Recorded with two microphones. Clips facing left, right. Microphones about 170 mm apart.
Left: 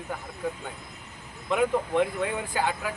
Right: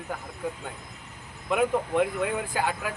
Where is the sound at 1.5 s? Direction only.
5° right (ahead or behind).